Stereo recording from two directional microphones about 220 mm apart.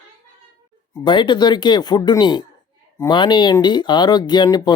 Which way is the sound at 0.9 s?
20° left (ahead or behind).